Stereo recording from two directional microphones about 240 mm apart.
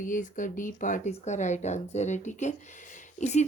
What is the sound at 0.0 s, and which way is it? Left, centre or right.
Speech, left.